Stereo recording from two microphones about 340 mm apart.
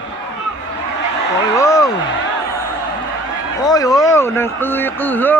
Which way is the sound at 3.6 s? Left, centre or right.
Centre.